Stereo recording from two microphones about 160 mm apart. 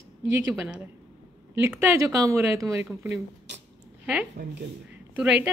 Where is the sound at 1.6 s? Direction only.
15° right (ahead or behind).